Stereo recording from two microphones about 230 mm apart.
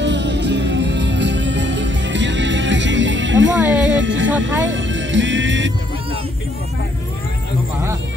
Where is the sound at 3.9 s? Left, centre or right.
Right.